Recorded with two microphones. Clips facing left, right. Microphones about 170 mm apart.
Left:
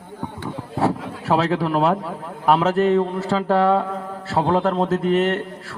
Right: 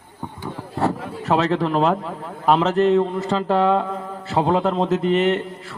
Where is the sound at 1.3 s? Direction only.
5° left (ahead or behind).